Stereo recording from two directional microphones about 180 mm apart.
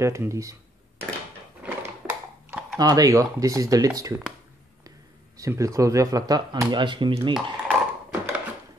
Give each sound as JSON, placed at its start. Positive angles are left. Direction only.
{"t": 0.0, "sound": "speech", "side_deg": -15}
{"t": 1.6, "sound": "typing", "side_deg": -5}
{"t": 2.8, "sound": "speech", "side_deg": -20}
{"t": 5.4, "sound": "speech", "side_deg": -20}
{"t": 7.3, "sound": "a sound", "side_deg": -5}